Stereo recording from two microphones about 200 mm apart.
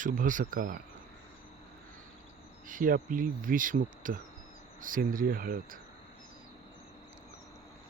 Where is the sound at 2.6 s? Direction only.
40° right (ahead or behind).